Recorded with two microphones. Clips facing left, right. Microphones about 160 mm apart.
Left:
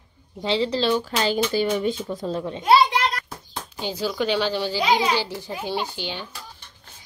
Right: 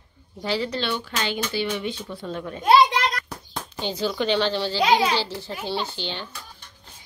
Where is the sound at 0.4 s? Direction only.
25° left (ahead or behind).